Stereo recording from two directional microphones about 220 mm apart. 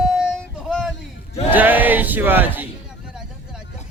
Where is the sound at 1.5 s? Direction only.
10° right (ahead or behind).